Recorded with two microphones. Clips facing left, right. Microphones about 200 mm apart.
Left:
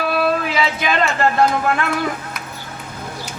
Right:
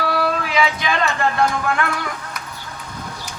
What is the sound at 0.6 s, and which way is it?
Music, 25° left (ahead or behind).